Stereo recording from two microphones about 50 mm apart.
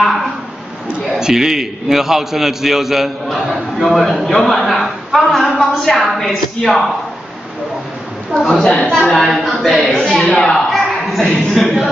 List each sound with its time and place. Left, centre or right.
1.2 s a man's voice: centre
8.4 s a woman's voice: centre
9.0 s speech: centre
9.4 s speech: centre
10.7 s a sound: centre